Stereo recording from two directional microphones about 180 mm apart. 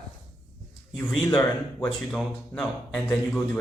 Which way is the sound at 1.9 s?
Centre (ahead or behind).